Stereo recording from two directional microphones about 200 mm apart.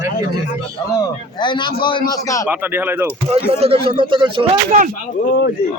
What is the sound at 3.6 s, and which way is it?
Speech, 30° right (ahead or behind).